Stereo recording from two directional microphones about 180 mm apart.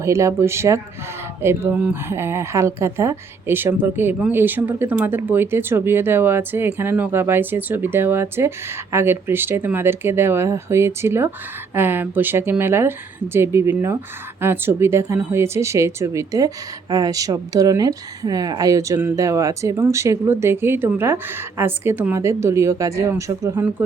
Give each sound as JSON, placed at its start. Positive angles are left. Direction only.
{"t": 0.0, "sound": "speech", "side_deg": -15}